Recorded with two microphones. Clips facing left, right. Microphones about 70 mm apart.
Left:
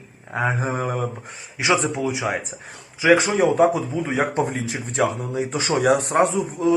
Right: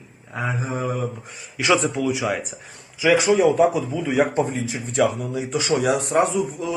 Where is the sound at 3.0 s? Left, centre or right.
Left.